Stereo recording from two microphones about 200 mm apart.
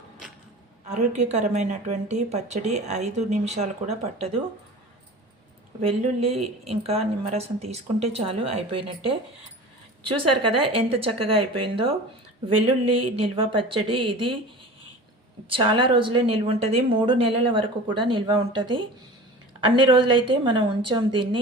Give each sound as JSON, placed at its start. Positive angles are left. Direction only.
{"t": 0.9, "sound": "a woman's voice", "side_deg": -35}
{"t": 5.8, "sound": "a woman's voice", "side_deg": -30}
{"t": 10.2, "sound": "a woman's voice", "side_deg": -25}
{"t": 15.4, "sound": "a woman's voice", "side_deg": -25}